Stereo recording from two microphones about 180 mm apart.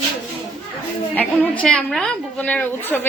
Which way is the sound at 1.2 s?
5° left (ahead or behind).